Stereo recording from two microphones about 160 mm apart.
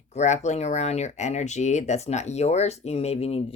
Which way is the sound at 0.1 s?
45° left (ahead or behind).